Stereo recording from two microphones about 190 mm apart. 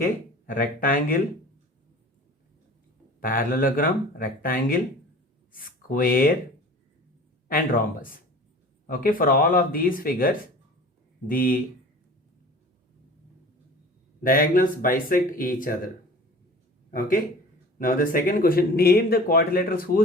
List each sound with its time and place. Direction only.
0.4 s speech: 45° left (ahead or behind)
3.2 s speech: 45° left (ahead or behind)
7.4 s speech: 50° left (ahead or behind)
14.2 s speech: 45° left (ahead or behind)
17.7 s speech: 45° left (ahead or behind)